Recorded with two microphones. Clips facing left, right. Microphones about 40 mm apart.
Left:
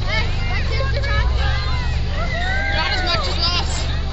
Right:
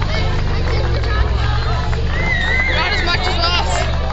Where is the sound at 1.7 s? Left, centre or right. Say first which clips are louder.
Right 5 dB; right.